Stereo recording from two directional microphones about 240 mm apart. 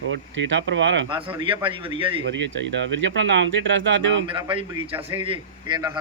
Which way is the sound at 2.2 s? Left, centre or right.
Right.